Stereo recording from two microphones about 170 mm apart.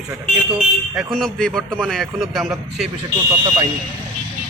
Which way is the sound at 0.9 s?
Centre (ahead or behind).